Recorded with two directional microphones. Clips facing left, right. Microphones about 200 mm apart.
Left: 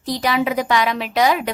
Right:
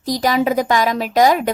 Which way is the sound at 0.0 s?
40° right (ahead or behind).